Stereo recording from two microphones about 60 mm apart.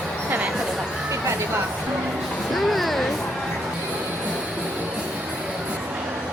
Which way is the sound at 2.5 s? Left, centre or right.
Centre.